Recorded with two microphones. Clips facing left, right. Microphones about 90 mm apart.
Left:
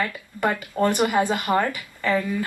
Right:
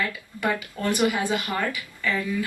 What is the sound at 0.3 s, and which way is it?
Speech, 45° left (ahead or behind).